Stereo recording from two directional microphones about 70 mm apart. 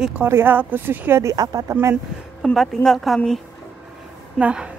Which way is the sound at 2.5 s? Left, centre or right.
Centre.